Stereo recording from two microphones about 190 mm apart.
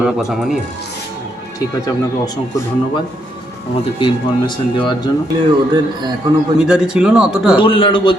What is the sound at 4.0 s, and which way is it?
Speech, 25° left (ahead or behind).